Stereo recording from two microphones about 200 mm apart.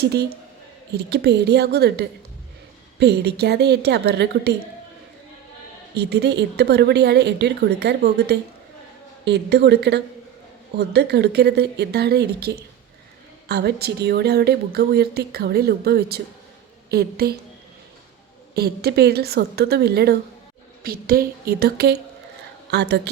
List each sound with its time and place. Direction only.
0.0 s a woman's voice: 55° right (ahead or behind)
6.0 s a woman's voice: 55° right (ahead or behind)
18.5 s a woman's voice: 50° right (ahead or behind)